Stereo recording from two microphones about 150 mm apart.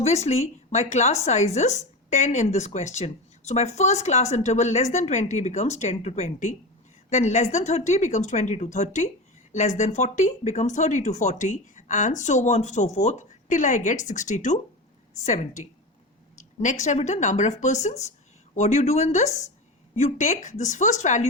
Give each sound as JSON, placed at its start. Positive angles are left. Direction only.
{"t": 0.0, "sound": "speech", "side_deg": 45}